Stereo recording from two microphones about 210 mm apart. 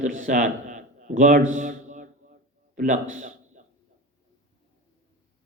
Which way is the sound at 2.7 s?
40° right (ahead or behind).